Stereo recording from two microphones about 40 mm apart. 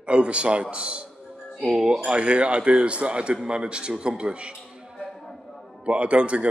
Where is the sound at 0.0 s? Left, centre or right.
Right.